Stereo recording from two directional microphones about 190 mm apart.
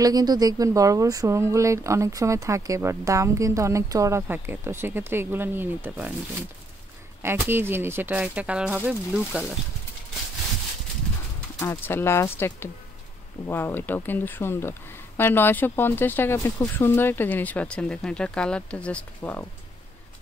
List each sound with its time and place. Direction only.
0.0 s speech: 20° right (ahead or behind)
7.2 s speech: 10° right (ahead or behind)
11.6 s speech: 10° left (ahead or behind)